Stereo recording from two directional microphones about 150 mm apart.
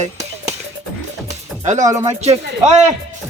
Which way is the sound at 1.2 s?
55° right (ahead or behind).